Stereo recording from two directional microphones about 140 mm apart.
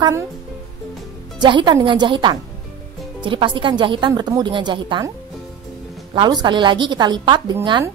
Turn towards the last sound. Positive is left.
turn(degrees=-30)  # may be behind; listen again after turning